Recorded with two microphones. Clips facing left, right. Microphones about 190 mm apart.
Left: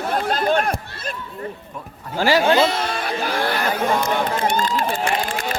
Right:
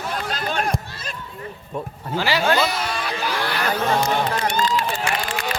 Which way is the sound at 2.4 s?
25° left (ahead or behind).